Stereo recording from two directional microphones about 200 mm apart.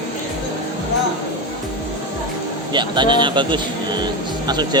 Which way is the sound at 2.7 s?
25° right (ahead or behind).